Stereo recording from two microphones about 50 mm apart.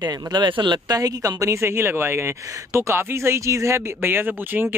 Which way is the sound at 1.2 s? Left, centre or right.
Right.